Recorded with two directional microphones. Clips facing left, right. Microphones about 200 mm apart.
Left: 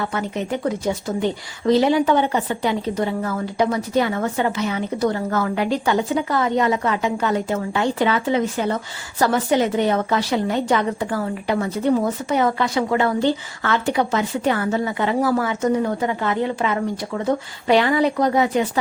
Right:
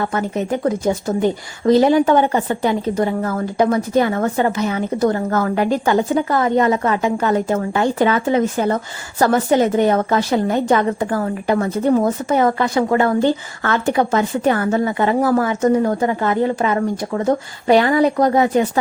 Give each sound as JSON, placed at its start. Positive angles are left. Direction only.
{"t": 0.0, "sound": "a woman's voice", "side_deg": -45}